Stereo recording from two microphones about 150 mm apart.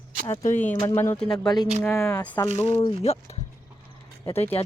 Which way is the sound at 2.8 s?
45° left (ahead or behind).